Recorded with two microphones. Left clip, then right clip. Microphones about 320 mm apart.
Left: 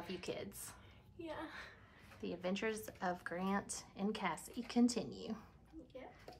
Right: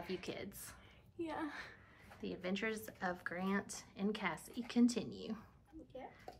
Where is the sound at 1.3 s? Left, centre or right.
Right.